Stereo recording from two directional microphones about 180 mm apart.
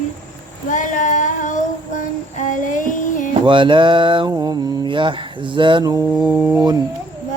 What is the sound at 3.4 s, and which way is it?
Mantra, 25° right (ahead or behind).